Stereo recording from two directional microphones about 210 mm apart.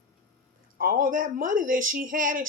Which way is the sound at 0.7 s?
45° right (ahead or behind).